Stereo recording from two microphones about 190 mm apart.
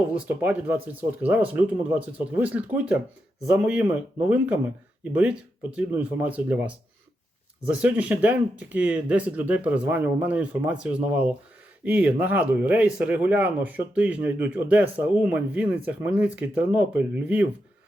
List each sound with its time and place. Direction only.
0.1 s speech: 10° right (ahead or behind)
7.8 s speech: 5° right (ahead or behind)